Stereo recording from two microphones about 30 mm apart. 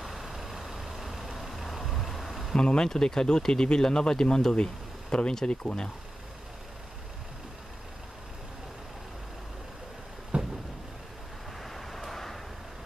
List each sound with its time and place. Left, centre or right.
0.0 s vehicle: centre
2.5 s speech: left
10.3 s a sound: right
11.6 s vehicle: centre